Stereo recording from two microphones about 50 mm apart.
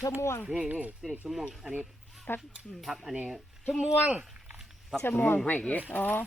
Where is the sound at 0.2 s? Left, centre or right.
Left.